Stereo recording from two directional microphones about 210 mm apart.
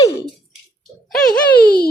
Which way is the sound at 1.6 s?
45° left (ahead or behind).